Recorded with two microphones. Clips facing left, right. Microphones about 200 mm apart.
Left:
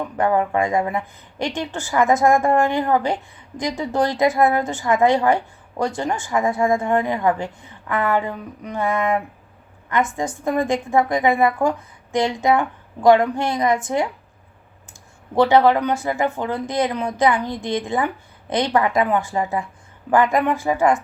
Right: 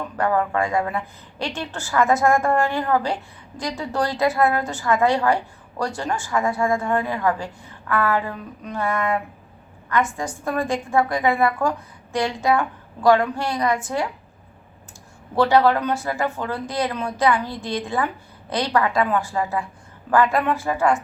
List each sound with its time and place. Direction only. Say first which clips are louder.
0.2 s a woman's voice: left 2 dB; 20° left (ahead or behind)
15.4 s a woman's voice: left 2 dB; 20° left (ahead or behind)